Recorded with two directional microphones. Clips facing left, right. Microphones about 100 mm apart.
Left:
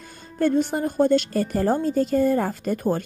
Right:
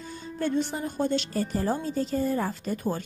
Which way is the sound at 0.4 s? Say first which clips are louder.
Left 7 dB; 50° left (ahead or behind).